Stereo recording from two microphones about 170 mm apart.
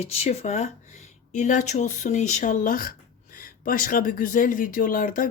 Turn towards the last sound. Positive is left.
turn(degrees=55)  # may be behind; listen again after turning